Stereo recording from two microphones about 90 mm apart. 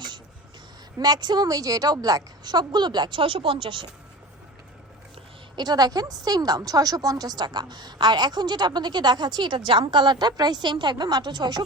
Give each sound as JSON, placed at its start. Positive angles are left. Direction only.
{"t": 0.9, "sound": "a woman's voice", "side_deg": -45}
{"t": 5.5, "sound": "a woman's voice", "side_deg": -50}